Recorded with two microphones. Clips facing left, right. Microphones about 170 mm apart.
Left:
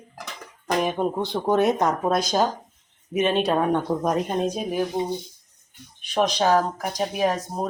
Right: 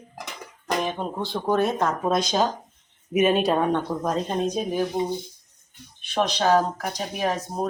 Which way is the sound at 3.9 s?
15° left (ahead or behind).